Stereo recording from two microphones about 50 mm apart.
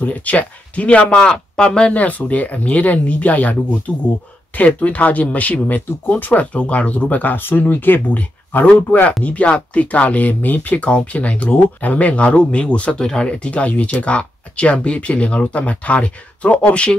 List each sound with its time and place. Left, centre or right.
0.0 s speech: left
1.1 s speech: centre; by 8.2 s left
9.2 s speech: left